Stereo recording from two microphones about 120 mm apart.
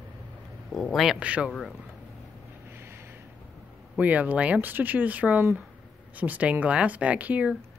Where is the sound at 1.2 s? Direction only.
10° right (ahead or behind).